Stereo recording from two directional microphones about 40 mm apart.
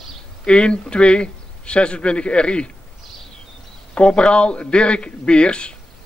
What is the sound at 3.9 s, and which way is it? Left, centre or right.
A man's voice, left.